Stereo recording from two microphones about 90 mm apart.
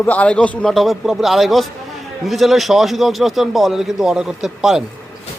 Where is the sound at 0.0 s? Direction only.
15° left (ahead or behind).